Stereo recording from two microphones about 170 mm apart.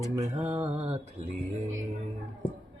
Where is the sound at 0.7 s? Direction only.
40° right (ahead or behind).